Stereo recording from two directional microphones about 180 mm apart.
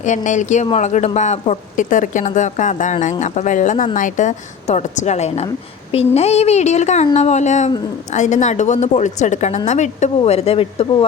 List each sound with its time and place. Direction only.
0.0 s speech: 40° left (ahead or behind)